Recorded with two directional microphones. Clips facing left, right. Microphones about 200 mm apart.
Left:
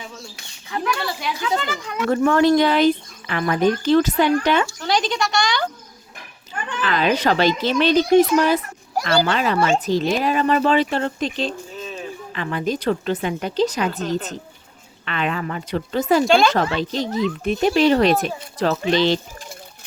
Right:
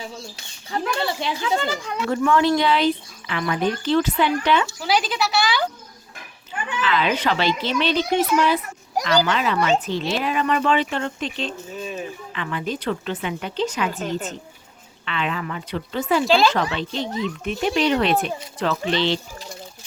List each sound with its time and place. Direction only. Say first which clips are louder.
0.7 s a child's voice: even; 25° right (ahead or behind)
2.0 s speech: left 3 dB; 45° left (ahead or behind)
4.8 s speech: left 1 dB; 5° right (ahead or behind)
6.8 s speech: left 3 dB; 45° left (ahead or behind)
11.8 s a sound: right 6 dB; 15° right (ahead or behind)
12.3 s speech: left 5 dB; 40° left (ahead or behind)
16.2 s speech: right 1 dB; centre (ahead or behind)
16.6 s speech: left 3 dB; 40° left (ahead or behind)